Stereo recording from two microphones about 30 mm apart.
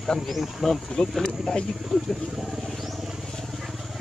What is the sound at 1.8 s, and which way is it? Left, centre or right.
Speech, centre.